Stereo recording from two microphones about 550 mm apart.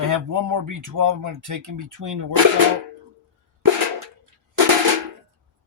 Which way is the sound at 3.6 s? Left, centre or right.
Right.